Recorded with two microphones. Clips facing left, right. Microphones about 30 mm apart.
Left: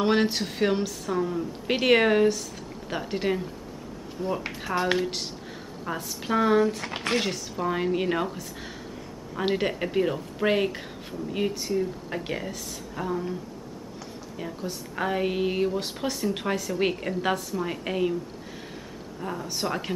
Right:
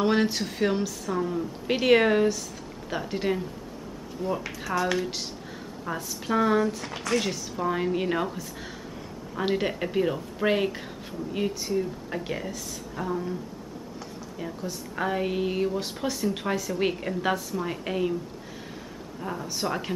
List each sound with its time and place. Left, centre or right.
0.0 s speech: centre
4.4 s speech: left
4.9 s speech: centre
6.9 s speech: left
7.5 s speech: centre
14.4 s speech: centre
19.4 s speech: centre